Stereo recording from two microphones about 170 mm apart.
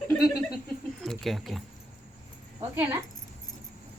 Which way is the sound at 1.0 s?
Centre (ahead or behind).